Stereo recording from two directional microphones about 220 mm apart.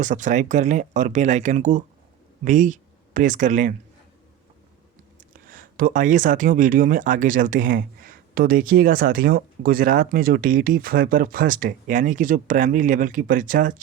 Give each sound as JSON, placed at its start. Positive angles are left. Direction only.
{"t": 0.0, "sound": "speech", "side_deg": -35}
{"t": 5.5, "sound": "speech", "side_deg": -40}